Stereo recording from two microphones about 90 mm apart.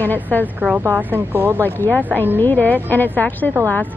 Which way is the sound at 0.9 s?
20° right (ahead or behind).